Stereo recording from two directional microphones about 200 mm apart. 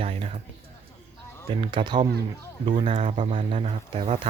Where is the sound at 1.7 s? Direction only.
20° right (ahead or behind).